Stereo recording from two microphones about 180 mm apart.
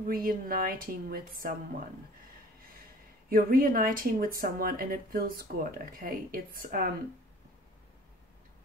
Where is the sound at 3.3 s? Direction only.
50° right (ahead or behind).